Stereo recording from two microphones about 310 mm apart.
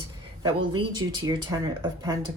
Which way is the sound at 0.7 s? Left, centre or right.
Centre.